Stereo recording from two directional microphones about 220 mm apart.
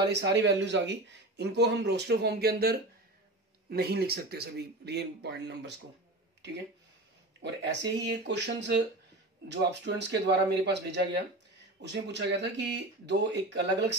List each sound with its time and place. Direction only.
0.1 s speech: 50° right (ahead or behind)
7.4 s speech: 50° right (ahead or behind)